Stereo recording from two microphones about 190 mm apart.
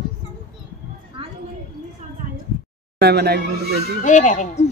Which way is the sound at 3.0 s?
55° right (ahead or behind).